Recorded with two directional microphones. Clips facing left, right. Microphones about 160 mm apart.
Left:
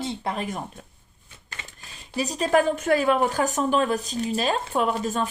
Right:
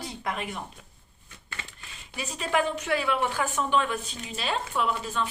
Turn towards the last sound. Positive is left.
turn(degrees=45)  # may be behind; listen again after turning